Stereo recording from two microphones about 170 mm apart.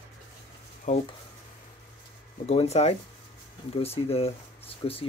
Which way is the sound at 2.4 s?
40° left (ahead or behind).